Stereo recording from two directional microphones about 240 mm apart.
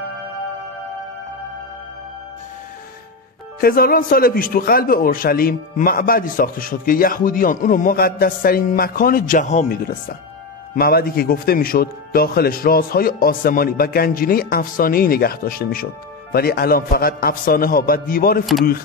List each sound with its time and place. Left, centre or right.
3.6 s a man's voice: left
18.4 s speech: centre